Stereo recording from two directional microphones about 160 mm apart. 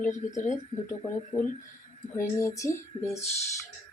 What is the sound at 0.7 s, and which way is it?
Speech, 25° left (ahead or behind).